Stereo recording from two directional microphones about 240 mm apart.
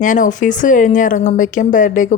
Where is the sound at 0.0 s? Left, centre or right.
Left.